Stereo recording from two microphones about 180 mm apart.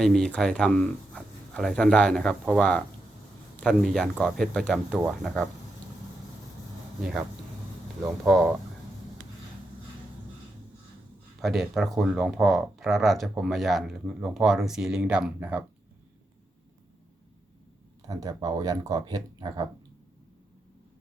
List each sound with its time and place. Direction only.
0.0 s speech: centre (ahead or behind)
7.0 s speech: 5° right (ahead or behind)
11.3 s speech: centre (ahead or behind)
18.1 s speech: 20° right (ahead or behind)